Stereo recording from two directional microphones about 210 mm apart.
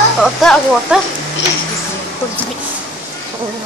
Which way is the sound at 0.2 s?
Centre (ahead or behind).